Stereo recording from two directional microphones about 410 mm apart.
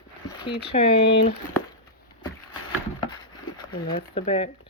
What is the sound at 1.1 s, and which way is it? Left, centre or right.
Speech, left.